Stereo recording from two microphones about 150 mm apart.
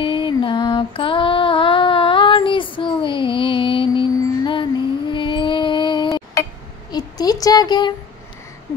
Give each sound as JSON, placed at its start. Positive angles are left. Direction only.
{"t": 0.0, "sound": "music", "side_deg": 35}
{"t": 5.1, "sound": "mantra", "side_deg": 35}
{"t": 6.9, "sound": "speech", "side_deg": 25}